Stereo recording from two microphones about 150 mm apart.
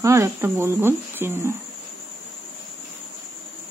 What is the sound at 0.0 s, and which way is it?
Speech, 20° right (ahead or behind).